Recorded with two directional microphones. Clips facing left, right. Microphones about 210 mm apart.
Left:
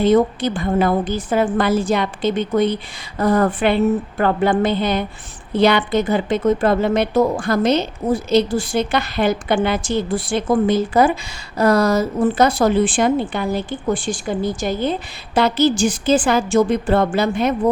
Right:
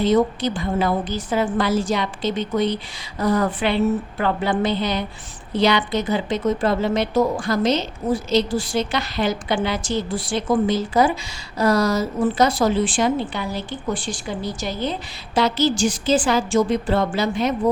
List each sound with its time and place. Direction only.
0.0 s a woman's voice: 55° left (ahead or behind)